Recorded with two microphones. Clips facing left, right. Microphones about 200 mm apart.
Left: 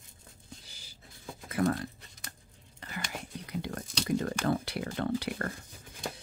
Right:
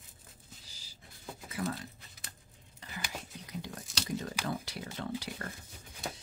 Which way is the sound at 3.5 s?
60° left (ahead or behind).